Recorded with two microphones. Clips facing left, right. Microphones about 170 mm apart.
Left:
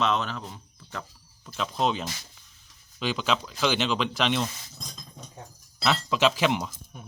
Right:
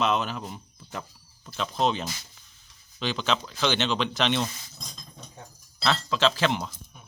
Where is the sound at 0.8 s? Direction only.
15° right (ahead or behind).